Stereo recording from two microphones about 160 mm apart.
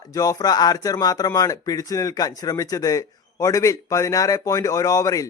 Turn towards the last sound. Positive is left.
turn(degrees=20)  # may be behind; listen again after turning